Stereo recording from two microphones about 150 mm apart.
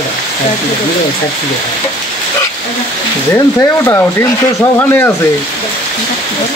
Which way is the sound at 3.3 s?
20° left (ahead or behind).